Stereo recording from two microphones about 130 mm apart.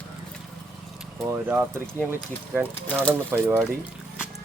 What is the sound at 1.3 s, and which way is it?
Speech, 15° right (ahead or behind).